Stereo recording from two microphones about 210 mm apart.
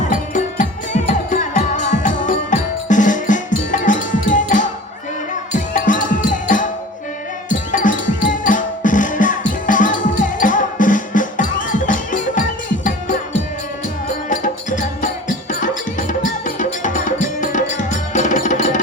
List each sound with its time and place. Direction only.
0.1 s music: 35° left (ahead or behind)
14.3 s music: 40° left (ahead or behind)